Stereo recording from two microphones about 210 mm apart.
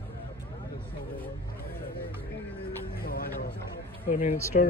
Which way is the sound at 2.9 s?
45° left (ahead or behind).